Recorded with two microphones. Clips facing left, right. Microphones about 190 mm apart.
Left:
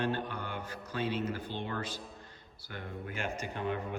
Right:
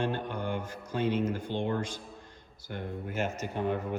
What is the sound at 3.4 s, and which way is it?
Speech, 50° right (ahead or behind).